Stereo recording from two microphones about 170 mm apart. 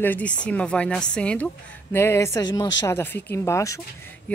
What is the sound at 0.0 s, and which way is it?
A woman's voice, 10° left (ahead or behind).